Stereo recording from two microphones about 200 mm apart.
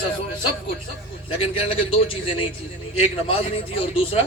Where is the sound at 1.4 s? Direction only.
25° left (ahead or behind).